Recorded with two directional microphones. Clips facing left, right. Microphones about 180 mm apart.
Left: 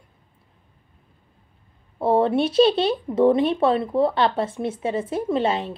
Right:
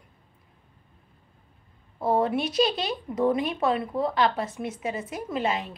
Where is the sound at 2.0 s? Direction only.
30° left (ahead or behind).